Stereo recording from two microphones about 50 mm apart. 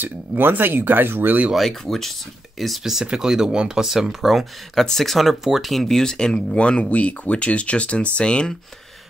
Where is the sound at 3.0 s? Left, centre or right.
Centre.